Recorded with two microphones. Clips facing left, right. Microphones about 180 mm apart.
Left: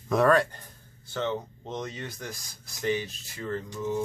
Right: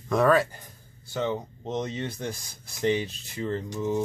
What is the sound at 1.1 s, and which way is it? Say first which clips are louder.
Speech: right 2 dB; 15° right (ahead or behind).